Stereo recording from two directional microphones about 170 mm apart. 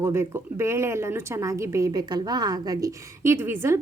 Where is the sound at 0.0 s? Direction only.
15° right (ahead or behind).